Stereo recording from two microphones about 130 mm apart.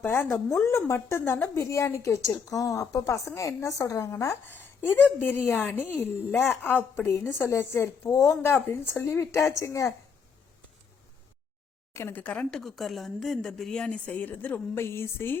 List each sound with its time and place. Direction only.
0.0 s a woman's voice: 15° left (ahead or behind)
11.9 s speech: 15° left (ahead or behind)